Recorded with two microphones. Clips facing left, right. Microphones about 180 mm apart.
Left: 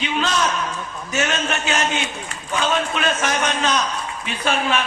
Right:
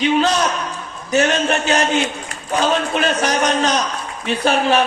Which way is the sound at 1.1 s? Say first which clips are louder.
Right 7 dB; 35° right (ahead or behind).